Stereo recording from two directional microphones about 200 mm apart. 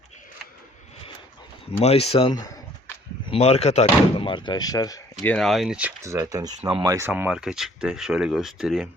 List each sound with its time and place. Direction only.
1.8 s speech: 30° left (ahead or behind)
5.1 s speech: 5° left (ahead or behind)